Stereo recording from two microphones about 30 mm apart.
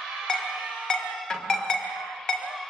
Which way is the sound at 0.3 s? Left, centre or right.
Left.